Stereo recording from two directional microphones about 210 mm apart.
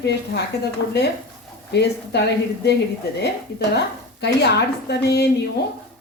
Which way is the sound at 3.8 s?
55° left (ahead or behind).